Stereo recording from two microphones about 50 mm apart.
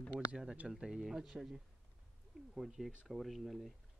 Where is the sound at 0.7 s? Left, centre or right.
Centre.